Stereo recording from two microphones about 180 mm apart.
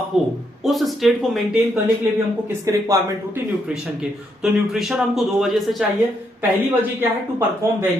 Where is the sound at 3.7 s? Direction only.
5° right (ahead or behind).